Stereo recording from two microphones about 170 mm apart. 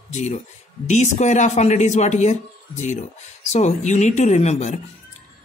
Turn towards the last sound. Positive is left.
turn(degrees=45)  # may be behind; listen again after turning